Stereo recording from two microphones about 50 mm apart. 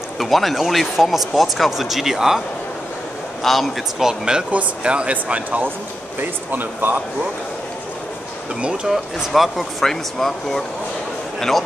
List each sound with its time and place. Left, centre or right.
0.2 s speech: centre
3.4 s speech: centre
4.5 s speech: right
6.5 s speech: right
8.8 s speech: centre